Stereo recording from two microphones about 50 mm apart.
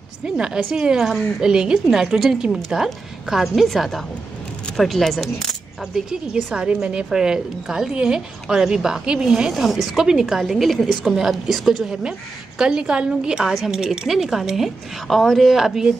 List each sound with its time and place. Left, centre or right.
0.2 s a woman's voice: centre
5.9 s a woman's voice: centre
6.4 s a woman's voice: right; by 12.0 s centre
12.0 s a woman's voice: centre